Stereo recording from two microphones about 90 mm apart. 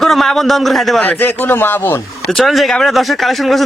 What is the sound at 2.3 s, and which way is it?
A man's voice, centre (ahead or behind).